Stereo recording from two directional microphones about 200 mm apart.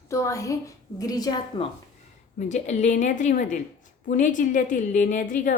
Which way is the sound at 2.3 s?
35° left (ahead or behind).